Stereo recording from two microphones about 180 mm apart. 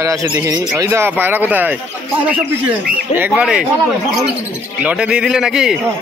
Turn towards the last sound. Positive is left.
turn(degrees=-5)  # may be behind; listen again after turning